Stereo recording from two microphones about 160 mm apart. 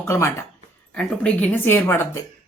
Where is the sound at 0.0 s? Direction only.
15° left (ahead or behind).